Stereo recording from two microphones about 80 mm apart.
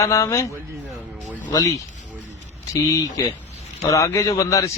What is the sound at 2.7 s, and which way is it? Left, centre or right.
A man's voice, left.